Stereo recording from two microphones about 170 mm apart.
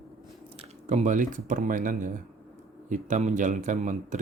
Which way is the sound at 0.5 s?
40° right (ahead or behind).